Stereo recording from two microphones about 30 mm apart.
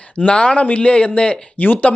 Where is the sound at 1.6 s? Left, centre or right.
Left.